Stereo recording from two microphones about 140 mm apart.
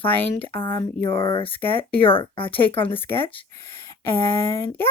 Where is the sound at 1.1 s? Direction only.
40° left (ahead or behind).